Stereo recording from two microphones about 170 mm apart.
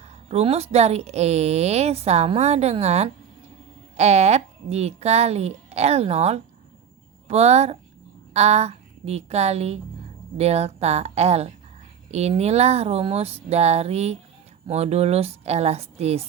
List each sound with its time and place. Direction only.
0.3 s a woman's voice: 35° right (ahead or behind)